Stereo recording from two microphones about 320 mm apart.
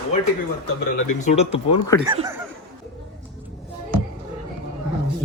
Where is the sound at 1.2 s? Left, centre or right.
Left.